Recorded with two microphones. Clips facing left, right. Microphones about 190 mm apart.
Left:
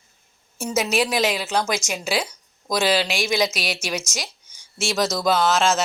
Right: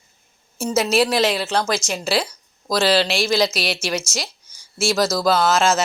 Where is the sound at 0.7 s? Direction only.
10° left (ahead or behind).